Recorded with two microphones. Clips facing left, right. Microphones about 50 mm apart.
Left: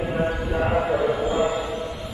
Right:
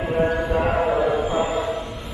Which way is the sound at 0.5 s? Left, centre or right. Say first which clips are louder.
Right 2 dB; centre.